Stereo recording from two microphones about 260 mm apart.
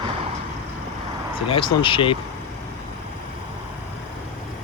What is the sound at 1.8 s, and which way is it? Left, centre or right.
Speech, centre.